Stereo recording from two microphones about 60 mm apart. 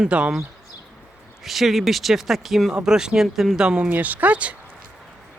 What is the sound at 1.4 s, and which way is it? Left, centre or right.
Speech, centre.